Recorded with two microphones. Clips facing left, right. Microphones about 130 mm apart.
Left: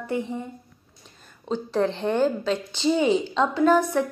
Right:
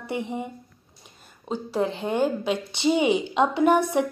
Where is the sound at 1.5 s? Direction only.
10° right (ahead or behind).